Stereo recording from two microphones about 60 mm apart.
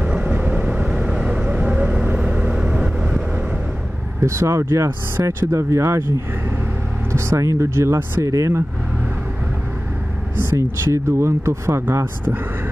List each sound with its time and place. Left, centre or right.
0.0 s vehicle: centre
4.2 s speech: right
7.1 s speech: right
8.2 s speech: right
10.3 s speech: right
11.9 s speech: right